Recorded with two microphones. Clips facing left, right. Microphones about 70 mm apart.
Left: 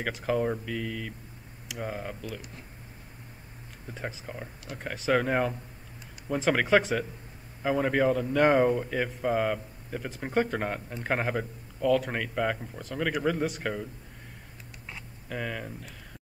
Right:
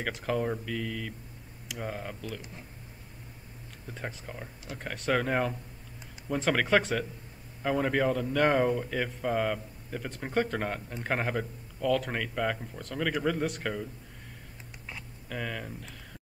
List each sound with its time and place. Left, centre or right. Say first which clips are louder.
0.0 s speech: left 2 dB; centre
3.8 s speech: left 2 dB; centre
14.9 s a sound: left 2 dB; centre